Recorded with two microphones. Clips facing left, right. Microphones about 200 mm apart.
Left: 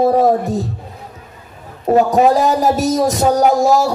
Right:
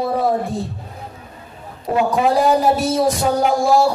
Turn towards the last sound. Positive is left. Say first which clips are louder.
# left 2 dB
turn(degrees=40)  # may be behind; listen again after turning